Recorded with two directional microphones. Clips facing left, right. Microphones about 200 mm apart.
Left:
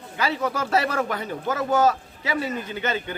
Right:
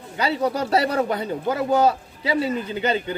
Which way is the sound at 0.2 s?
35° right (ahead or behind).